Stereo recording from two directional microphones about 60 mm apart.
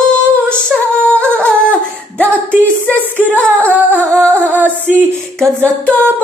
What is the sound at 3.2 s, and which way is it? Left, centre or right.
Singing, left.